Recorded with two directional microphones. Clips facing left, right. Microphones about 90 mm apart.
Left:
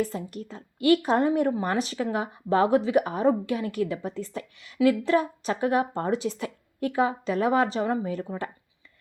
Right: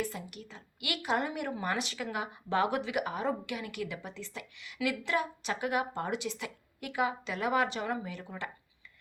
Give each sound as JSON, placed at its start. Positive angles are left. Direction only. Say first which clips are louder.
{"t": 0.0, "sound": "a woman's voice", "louder": "left 8 dB", "side_deg": 35}